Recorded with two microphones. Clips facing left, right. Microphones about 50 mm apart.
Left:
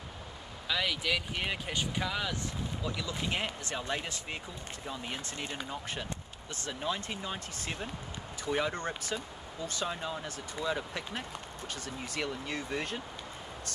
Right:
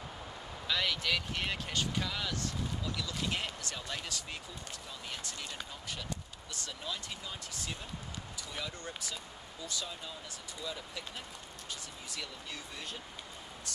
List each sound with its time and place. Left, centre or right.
0.7 s speech: centre; by 13.0 s left